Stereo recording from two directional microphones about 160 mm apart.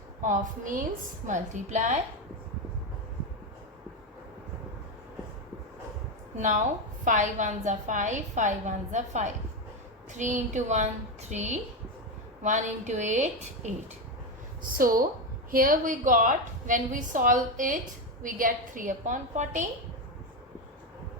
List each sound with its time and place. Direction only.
0.2 s a woman's voice: 55° right (ahead or behind)
6.3 s a woman's voice: 50° right (ahead or behind)
14.8 s a woman's voice: 60° right (ahead or behind)